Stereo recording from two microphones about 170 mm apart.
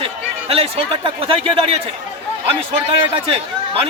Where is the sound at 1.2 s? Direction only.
35° right (ahead or behind).